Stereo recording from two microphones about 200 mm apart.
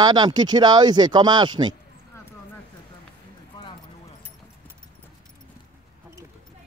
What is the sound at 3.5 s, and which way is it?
Clip-clop, 20° left (ahead or behind).